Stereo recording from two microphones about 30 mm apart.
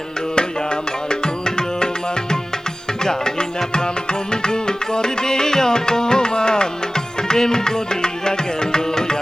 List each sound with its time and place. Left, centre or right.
1.2 s tabla: left
3.0 s music: left